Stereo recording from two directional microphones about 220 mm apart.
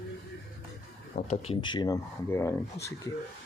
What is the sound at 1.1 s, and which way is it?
Speech, 30° left (ahead or behind).